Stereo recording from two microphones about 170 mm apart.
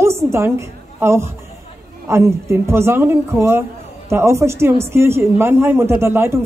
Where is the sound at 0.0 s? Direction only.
15° right (ahead or behind).